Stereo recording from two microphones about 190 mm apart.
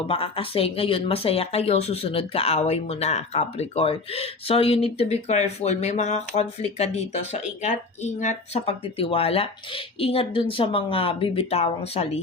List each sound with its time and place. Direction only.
0.1 s speech: 30° left (ahead or behind)